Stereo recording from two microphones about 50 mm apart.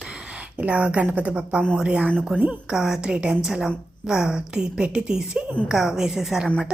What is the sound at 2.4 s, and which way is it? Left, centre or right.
Speech, centre.